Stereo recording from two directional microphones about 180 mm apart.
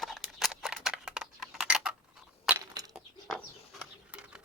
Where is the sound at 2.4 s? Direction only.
15° right (ahead or behind).